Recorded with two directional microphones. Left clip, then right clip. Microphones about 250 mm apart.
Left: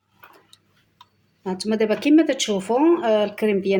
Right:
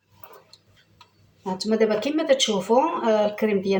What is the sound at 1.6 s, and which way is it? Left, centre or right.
Speech, left.